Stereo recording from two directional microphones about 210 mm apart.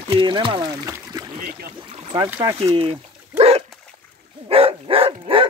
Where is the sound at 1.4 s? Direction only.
45° right (ahead or behind).